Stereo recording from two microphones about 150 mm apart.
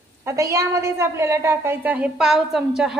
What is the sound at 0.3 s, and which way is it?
A woman's voice, 20° right (ahead or behind).